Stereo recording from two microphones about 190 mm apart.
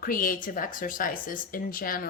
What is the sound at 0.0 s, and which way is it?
A woman's voice, 45° left (ahead or behind).